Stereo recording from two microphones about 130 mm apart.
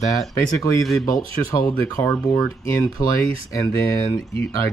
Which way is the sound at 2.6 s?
20° left (ahead or behind).